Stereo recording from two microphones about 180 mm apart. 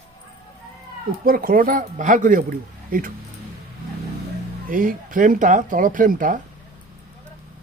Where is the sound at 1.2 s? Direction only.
55° right (ahead or behind).